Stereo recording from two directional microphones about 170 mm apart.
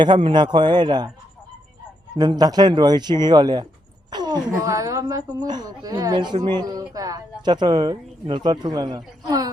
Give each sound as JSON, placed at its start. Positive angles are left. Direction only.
{"t": 0.0, "sound": "speech", "side_deg": -30}
{"t": 2.4, "sound": "speech", "side_deg": -25}